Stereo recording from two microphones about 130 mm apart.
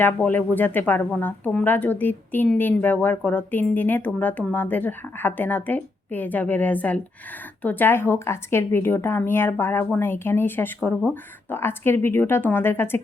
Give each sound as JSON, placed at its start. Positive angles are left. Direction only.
{"t": 0.0, "sound": "speech", "side_deg": 15}